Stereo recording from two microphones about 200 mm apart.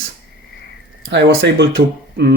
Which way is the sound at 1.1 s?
60° right (ahead or behind).